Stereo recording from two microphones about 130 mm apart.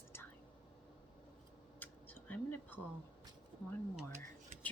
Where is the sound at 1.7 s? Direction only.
15° left (ahead or behind).